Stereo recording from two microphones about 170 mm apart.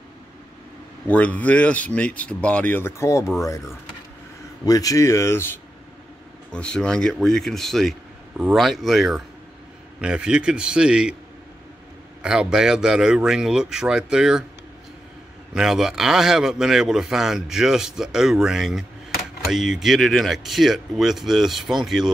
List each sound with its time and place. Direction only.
1.0 s speech: 10° left (ahead or behind)
4.6 s a man's voice: 20° left (ahead or behind); by 11.1 s 5° right (ahead or behind)
12.2 s a man's voice: 5° right (ahead or behind)
15.5 s a man's voice: 5° right (ahead or behind)